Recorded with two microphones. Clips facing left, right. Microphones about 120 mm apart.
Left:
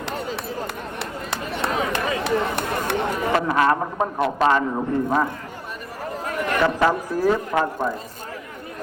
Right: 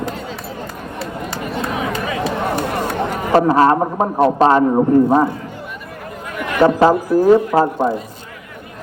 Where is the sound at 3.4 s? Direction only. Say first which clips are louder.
Right 7 dB; 30° right (ahead or behind).